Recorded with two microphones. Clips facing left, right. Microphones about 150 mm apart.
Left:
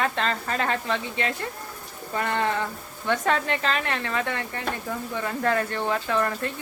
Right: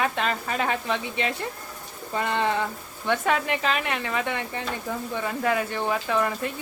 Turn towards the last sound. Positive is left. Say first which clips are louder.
# even
turn(degrees=-10)  # may be behind; listen again after turning